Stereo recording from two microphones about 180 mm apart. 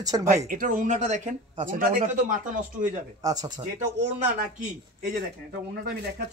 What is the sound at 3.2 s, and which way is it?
Speech, 20° right (ahead or behind).